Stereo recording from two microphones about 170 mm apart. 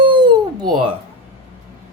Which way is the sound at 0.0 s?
30° right (ahead or behind).